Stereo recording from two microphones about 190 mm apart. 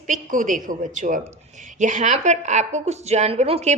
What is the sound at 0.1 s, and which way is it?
A woman's voice, 45° right (ahead or behind).